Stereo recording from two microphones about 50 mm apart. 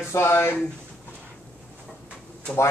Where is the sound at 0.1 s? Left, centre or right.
Left.